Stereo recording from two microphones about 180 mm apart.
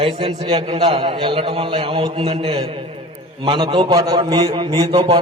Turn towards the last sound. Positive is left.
turn(degrees=-35)  # may be behind; listen again after turning